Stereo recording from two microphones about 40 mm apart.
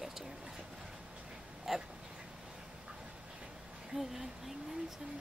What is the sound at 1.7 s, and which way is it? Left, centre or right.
Speech, centre.